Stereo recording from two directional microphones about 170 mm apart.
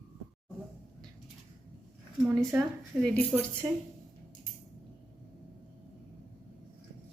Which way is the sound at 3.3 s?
10° right (ahead or behind).